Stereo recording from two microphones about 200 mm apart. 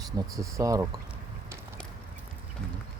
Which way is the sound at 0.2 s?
15° right (ahead or behind).